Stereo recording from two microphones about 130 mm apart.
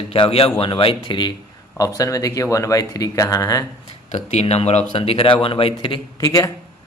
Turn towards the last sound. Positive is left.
turn(degrees=25)  # may be behind; listen again after turning